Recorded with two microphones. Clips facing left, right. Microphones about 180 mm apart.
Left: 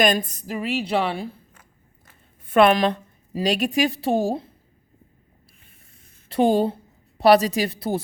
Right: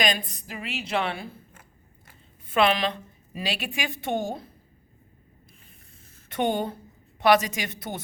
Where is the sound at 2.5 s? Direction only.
50° left (ahead or behind); by 4.5 s 30° left (ahead or behind).